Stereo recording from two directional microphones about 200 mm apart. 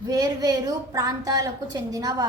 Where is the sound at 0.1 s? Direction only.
20° right (ahead or behind).